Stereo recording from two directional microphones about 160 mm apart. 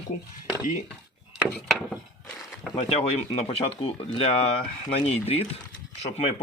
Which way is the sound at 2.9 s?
35° left (ahead or behind).